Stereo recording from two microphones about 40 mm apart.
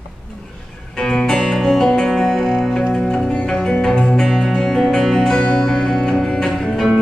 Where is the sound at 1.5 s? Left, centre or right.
Centre.